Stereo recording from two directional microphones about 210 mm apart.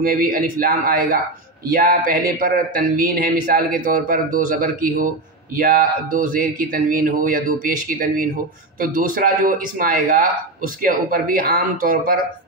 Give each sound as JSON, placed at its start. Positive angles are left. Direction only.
{"t": 0.0, "sound": "speech", "side_deg": -45}